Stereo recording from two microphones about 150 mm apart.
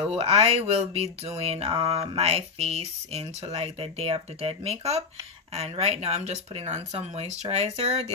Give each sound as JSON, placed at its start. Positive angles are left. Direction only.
{"t": 0.2, "sound": "speech", "side_deg": -40}